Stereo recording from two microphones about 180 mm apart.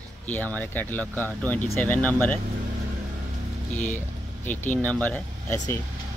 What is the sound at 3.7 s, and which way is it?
Speech, 10° left (ahead or behind).